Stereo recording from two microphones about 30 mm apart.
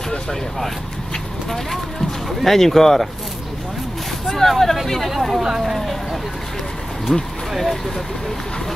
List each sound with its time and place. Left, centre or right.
2.4 s speech: centre
4.4 s speech: centre
7.1 s speech: centre